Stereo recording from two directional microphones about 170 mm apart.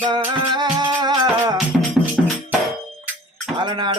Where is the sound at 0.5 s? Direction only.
25° right (ahead or behind).